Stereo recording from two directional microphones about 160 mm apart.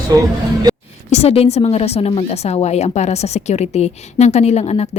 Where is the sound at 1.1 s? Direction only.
40° left (ahead or behind).